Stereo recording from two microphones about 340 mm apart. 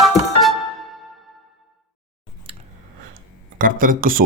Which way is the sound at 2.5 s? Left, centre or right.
Centre.